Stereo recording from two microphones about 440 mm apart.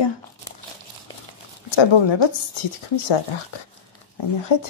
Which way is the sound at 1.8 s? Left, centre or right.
Left.